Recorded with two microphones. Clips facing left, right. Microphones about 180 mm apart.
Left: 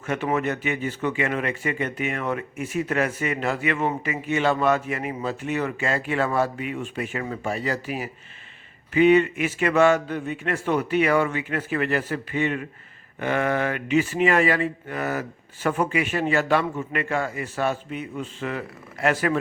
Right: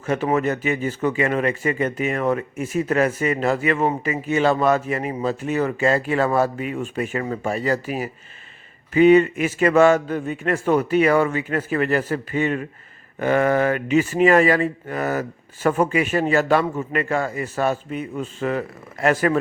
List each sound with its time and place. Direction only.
0.0 s speech: 35° right (ahead or behind)